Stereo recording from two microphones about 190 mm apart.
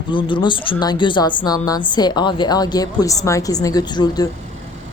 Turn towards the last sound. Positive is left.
turn(degrees=20)  # may be behind; listen again after turning